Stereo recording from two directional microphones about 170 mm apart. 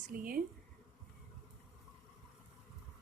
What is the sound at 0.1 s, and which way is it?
Speech, 55° right (ahead or behind).